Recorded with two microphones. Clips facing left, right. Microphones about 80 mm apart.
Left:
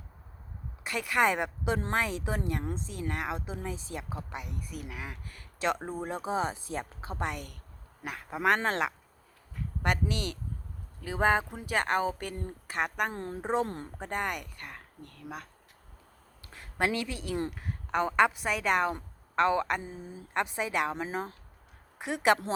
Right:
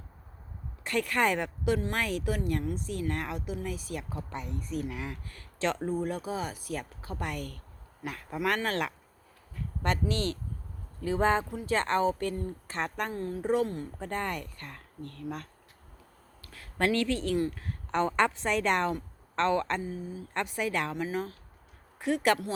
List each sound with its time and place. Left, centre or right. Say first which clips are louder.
0.9 s speech: even; centre
4.2 s speech: right 2 dB; centre
9.8 s speech: right 1 dB; centre
13.1 s speech: right 6 dB; left
14.0 s speech: left 1 dB; centre
16.5 s speech: right 2 dB; centre
19.8 s speech: right 5 dB; left